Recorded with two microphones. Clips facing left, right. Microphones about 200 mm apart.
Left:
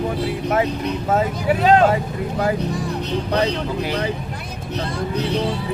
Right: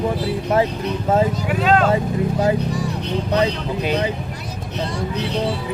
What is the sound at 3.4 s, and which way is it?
Speech, 20° right (ahead or behind).